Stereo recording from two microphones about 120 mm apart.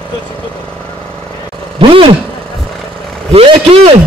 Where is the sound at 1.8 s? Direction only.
45° right (ahead or behind).